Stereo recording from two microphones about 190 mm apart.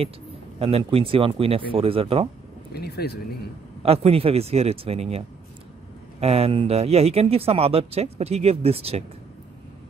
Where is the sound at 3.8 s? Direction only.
30° right (ahead or behind).